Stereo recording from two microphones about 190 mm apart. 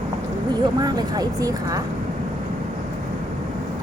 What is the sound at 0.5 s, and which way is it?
Speech, 20° right (ahead or behind).